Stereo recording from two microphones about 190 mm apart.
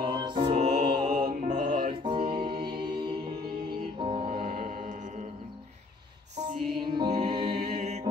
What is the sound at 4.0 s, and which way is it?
Music, 25° right (ahead or behind).